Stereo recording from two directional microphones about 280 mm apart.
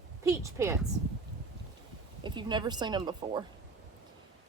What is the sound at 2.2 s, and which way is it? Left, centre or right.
A woman's voice, centre.